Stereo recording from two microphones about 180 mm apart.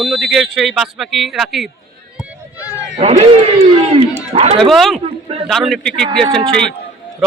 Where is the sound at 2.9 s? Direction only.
40° right (ahead or behind).